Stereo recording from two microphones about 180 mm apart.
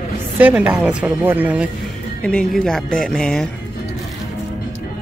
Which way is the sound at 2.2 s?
5° left (ahead or behind).